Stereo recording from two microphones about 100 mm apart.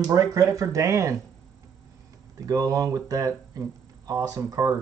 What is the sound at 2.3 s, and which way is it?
Speech, 35° right (ahead or behind).